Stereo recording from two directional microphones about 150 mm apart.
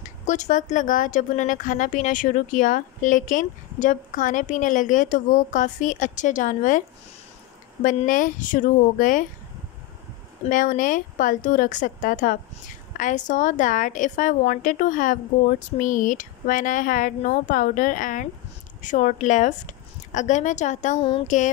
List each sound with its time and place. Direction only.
0.0 s speech: 55° left (ahead or behind)
7.8 s speech: 60° left (ahead or behind)
10.4 s a woman's voice: 60° left (ahead or behind)